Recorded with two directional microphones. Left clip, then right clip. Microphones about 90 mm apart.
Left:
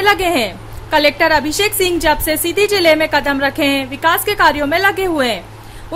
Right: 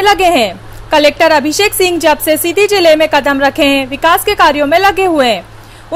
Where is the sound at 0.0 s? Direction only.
35° right (ahead or behind).